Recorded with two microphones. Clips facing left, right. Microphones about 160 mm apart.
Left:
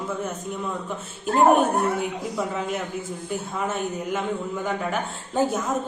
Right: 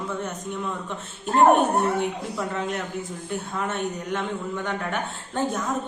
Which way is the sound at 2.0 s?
5° left (ahead or behind).